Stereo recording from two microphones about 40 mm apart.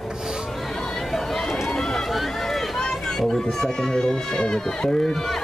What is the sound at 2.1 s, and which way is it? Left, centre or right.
Speech, centre.